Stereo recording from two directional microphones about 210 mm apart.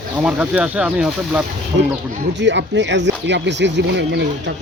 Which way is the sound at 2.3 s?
60° right (ahead or behind).